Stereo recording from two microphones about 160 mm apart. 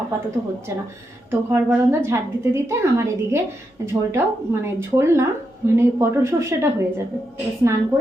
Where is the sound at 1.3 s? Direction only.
15° right (ahead or behind).